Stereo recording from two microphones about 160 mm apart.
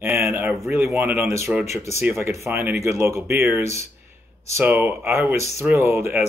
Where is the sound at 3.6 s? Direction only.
45° left (ahead or behind).